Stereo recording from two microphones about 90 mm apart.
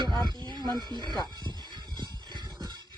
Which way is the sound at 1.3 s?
55° right (ahead or behind).